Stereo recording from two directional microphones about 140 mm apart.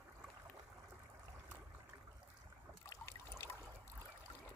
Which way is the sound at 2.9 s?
20° left (ahead or behind).